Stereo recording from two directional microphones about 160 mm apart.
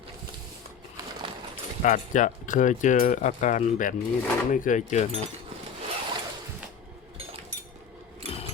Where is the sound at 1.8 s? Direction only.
50° left (ahead or behind).